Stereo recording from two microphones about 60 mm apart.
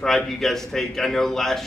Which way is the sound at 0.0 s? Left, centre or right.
Centre.